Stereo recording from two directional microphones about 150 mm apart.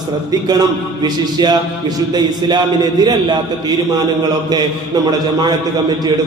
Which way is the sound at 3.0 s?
30° right (ahead or behind).